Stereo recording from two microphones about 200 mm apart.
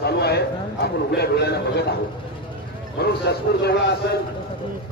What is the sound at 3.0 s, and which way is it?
Speech, 55° left (ahead or behind).